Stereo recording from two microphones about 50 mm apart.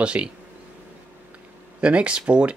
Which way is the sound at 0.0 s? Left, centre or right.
Right.